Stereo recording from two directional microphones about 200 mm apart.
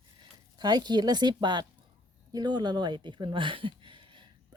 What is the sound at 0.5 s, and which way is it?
Speech, 20° right (ahead or behind).